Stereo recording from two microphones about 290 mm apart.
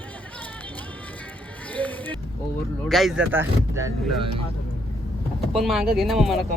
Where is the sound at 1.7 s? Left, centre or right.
Centre.